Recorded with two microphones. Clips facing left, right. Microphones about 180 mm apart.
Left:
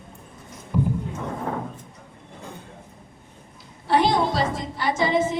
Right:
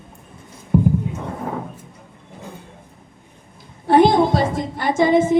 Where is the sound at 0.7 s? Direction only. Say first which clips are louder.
Right 7 dB; 55° right (ahead or behind).